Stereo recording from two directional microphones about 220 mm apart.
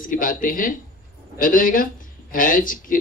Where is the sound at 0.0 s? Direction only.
40° left (ahead or behind).